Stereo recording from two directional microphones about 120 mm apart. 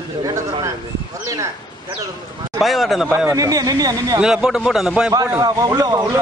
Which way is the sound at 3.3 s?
30° right (ahead or behind).